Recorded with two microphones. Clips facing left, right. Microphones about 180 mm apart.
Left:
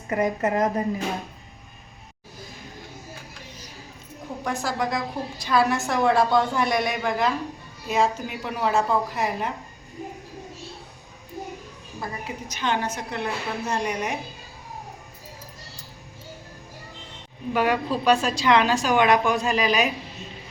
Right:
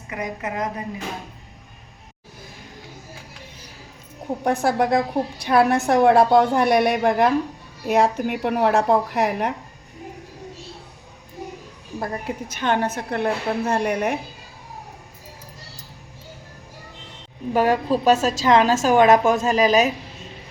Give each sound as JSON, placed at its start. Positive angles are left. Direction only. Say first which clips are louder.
{"t": 0.1, "sound": "a woman's voice", "louder": "left 6 dB", "side_deg": 45}
{"t": 4.4, "sound": "a woman's voice", "louder": "right 7 dB", "side_deg": -60}
{"t": 11.9, "sound": "a woman's voice", "louder": "right 6 dB", "side_deg": -55}
{"t": 17.5, "sound": "a woman's voice", "louder": "right 4 dB", "side_deg": -40}